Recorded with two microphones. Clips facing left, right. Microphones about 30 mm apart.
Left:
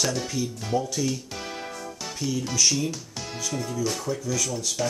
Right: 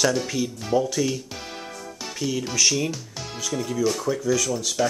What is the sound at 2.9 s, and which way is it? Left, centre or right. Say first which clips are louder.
Speech: right 1 dB; centre.